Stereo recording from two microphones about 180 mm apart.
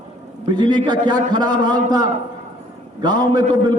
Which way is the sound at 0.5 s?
25° right (ahead or behind).